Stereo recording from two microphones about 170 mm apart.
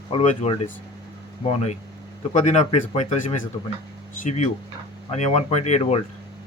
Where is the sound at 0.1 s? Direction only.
35° left (ahead or behind).